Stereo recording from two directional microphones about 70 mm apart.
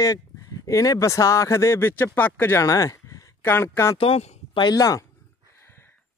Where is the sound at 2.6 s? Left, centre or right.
Left.